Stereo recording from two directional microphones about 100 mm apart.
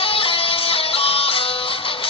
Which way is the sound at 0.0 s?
70° left (ahead or behind).